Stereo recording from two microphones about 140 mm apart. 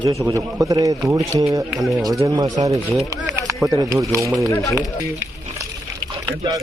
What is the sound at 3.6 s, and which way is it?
Speech, 25° right (ahead or behind).